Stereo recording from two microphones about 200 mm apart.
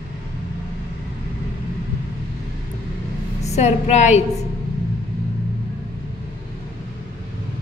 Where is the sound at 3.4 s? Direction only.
35° left (ahead or behind).